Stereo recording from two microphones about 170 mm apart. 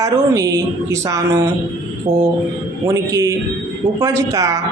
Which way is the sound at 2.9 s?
20° right (ahead or behind).